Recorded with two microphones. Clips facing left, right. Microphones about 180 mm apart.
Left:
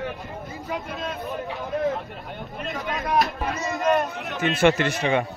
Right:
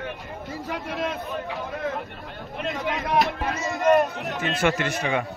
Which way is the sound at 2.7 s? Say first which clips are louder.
Even; 20° right (ahead or behind).